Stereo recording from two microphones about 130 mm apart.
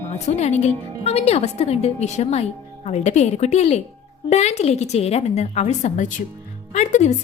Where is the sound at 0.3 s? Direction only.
60° left (ahead or behind).